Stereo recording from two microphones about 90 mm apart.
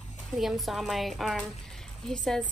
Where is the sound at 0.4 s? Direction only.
Centre (ahead or behind).